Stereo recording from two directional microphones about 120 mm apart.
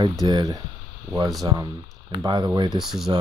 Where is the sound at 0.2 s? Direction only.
35° right (ahead or behind).